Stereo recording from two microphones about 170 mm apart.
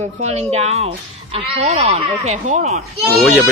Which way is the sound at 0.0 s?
40° right (ahead or behind).